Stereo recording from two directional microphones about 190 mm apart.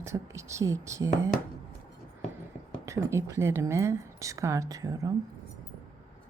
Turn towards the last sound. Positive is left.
turn(degrees=-15)  # may be behind; listen again after turning